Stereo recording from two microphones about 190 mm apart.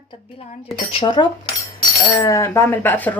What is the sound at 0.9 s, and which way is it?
Speech, 30° left (ahead or behind).